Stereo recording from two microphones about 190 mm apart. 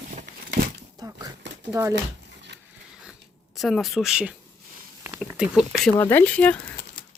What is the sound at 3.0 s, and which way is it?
Zipper, centre (ahead or behind).